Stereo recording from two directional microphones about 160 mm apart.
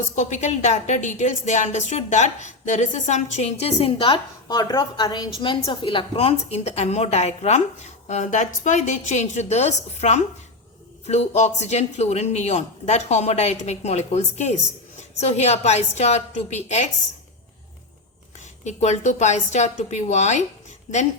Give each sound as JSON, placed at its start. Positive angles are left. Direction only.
{"t": 0.2, "sound": "a woman's voice", "side_deg": 50}
{"t": 18.6, "sound": "a woman's voice", "side_deg": 45}